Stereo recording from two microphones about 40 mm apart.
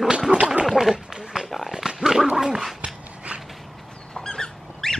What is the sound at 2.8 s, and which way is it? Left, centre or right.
Dog, right.